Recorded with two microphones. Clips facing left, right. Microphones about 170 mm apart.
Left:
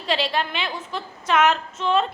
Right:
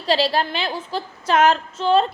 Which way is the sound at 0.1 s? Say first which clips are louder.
Right 4 dB; 35° right (ahead or behind).